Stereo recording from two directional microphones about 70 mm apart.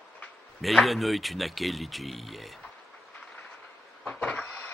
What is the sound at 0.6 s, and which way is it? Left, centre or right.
Speech, centre.